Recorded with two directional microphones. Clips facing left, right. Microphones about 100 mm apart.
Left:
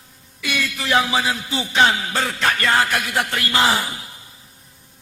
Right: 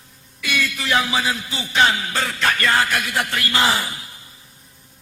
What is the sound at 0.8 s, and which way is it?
A man's voice, 25° left (ahead or behind).